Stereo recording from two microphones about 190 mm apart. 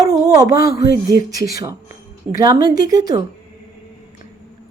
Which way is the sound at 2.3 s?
15° right (ahead or behind).